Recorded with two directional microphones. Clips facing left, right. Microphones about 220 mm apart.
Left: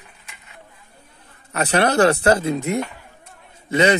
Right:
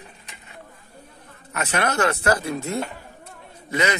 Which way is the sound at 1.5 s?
35° left (ahead or behind).